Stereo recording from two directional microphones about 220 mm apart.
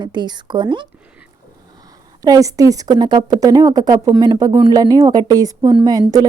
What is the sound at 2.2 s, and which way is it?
A woman's voice, 15° right (ahead or behind).